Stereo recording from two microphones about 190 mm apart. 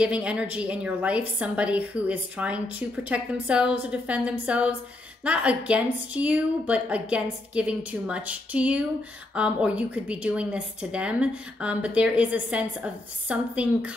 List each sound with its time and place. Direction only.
0.0 s a woman's voice: 5° right (ahead or behind)